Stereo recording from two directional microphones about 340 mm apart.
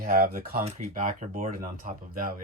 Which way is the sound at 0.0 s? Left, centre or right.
Right.